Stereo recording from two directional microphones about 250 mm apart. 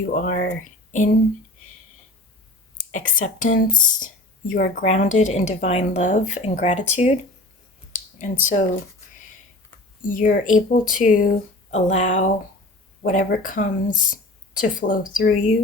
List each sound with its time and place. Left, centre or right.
0.0 s speech: left
0.6 s a sound: left
2.7 s speech: left
10.0 s speech: left